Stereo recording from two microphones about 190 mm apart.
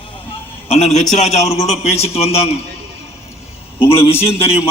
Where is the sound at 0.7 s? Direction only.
35° left (ahead or behind).